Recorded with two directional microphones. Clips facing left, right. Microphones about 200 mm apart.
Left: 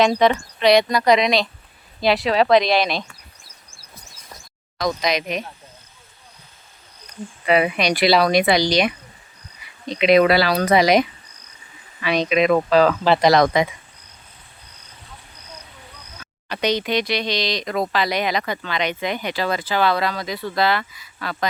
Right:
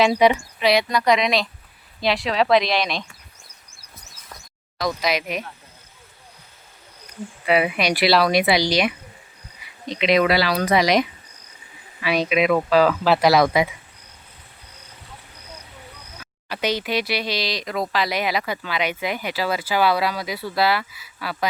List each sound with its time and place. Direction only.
0.0 s speech: 10° right (ahead or behind)
4.9 s speech: 5° right (ahead or behind)
7.4 s speech: 5° right (ahead or behind)
10.2 s speech: 50° left (ahead or behind)
12.0 s speech: 5° right (ahead or behind)
16.2 s speech: 5° right (ahead or behind)